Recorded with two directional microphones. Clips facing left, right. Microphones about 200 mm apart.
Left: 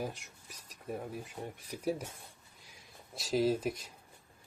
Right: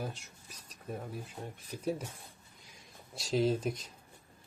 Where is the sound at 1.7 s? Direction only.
10° left (ahead or behind).